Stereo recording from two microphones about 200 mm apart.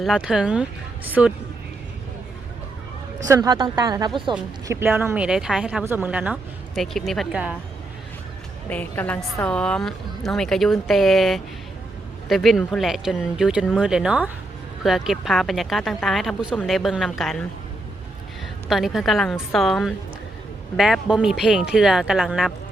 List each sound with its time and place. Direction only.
0.0 s a woman's voice: centre (ahead or behind)
3.2 s speech: 15° right (ahead or behind)
4.8 s a woman's voice: 10° right (ahead or behind)
8.7 s a woman's voice: 5° left (ahead or behind)
18.7 s a woman's voice: centre (ahead or behind)